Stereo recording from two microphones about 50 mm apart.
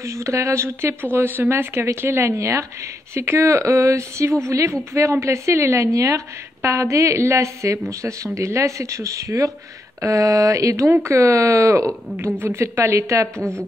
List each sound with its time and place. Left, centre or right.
0.0 s speech: right
1.1 s speech: right
1.5 s speech: right
3.2 s a woman's voice: right
10.9 s a woman's voice: right
12.4 s speech: right
13.4 s a woman's voice: left